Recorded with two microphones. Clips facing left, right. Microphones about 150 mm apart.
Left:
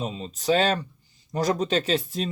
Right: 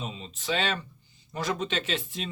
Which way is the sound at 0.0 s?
40° left (ahead or behind).